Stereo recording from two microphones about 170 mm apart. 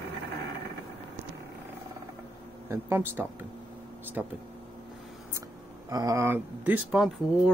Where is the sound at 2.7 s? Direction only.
15° right (ahead or behind).